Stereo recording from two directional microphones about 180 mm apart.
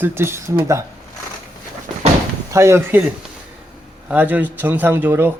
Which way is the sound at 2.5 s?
15° right (ahead or behind).